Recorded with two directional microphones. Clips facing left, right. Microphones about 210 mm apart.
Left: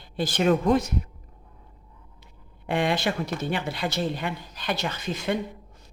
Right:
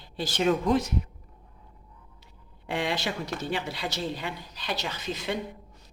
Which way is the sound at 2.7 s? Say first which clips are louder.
Left 5 dB; 55° left (ahead or behind).